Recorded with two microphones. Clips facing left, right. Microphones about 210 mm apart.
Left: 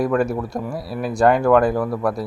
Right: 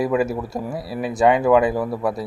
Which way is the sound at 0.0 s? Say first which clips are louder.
Left 1 dB; 5° right (ahead or behind).